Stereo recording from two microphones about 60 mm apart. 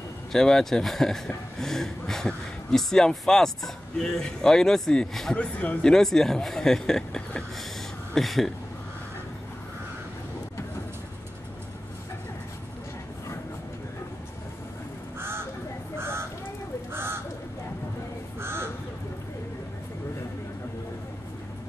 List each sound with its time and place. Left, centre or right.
0.3 s speech: centre
5.3 s speech: left
5.8 s speech: centre
8.1 s speech: centre
15.1 s crow: right
16.0 s a sound: right
16.9 s bird: right
18.4 s crow: right